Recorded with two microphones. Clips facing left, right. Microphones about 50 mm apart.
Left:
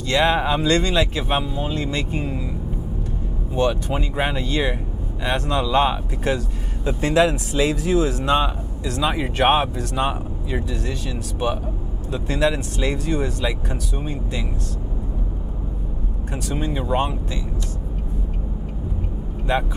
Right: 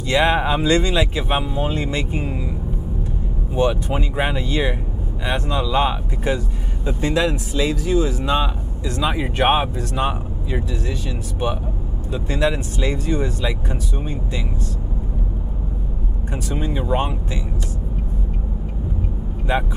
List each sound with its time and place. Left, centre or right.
0.1 s speech: centre
3.5 s speech: centre
5.2 s speech: centre
16.4 s speech: centre